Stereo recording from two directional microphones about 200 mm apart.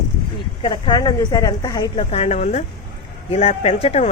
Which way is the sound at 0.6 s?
25° left (ahead or behind).